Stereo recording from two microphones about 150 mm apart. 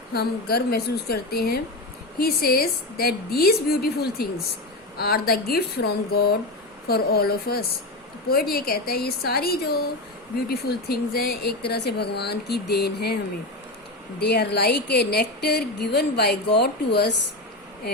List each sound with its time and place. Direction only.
0.1 s a woman's voice: 90° left
14.2 s a woman's voice: 90° left